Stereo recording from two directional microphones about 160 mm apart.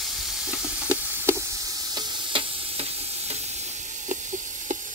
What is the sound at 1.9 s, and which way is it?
Stir, 30° right (ahead or behind).